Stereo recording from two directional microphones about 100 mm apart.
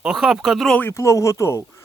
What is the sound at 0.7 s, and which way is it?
Speech, 20° left (ahead or behind).